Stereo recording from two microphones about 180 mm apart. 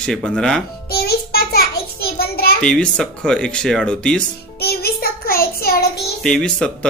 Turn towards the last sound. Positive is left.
turn(degrees=5)  # may be behind; listen again after turning